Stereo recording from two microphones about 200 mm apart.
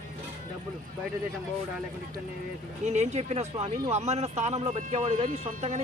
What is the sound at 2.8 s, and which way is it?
Speech, 35° right (ahead or behind).